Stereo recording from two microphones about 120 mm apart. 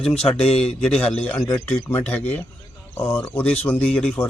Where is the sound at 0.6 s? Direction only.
5° left (ahead or behind).